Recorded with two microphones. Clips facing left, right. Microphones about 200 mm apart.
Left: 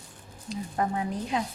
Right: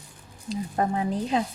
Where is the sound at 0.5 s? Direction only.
30° right (ahead or behind).